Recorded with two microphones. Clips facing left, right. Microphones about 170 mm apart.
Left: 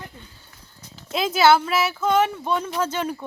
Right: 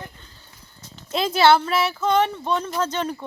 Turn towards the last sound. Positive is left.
turn(degrees=10)  # may be behind; listen again after turning